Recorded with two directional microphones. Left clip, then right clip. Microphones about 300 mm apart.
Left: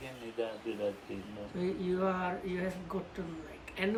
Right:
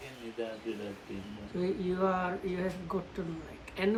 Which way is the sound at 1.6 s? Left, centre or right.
Centre.